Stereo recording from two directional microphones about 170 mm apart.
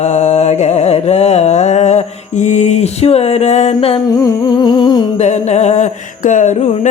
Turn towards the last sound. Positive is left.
turn(degrees=45)  # may be behind; listen again after turning